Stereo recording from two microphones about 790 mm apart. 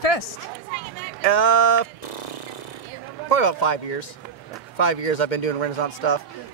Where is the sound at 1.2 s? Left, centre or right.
Left.